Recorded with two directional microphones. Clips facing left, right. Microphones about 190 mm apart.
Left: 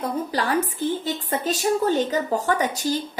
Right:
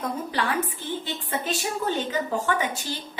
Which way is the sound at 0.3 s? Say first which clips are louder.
Left 4 dB; 40° left (ahead or behind).